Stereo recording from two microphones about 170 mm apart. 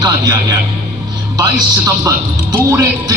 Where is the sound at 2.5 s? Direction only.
20° right (ahead or behind).